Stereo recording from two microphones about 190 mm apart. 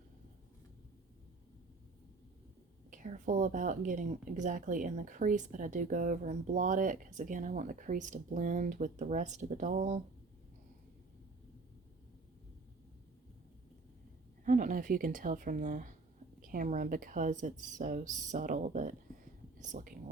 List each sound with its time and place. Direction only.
2.9 s speech: 40° right (ahead or behind)
14.4 s speech: 45° right (ahead or behind)